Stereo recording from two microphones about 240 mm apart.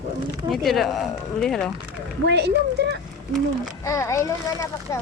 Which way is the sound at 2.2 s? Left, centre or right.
Right.